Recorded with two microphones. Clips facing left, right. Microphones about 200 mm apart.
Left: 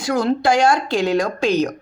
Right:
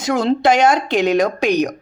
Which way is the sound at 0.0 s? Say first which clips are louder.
Right 2 dB; 25° right (ahead or behind).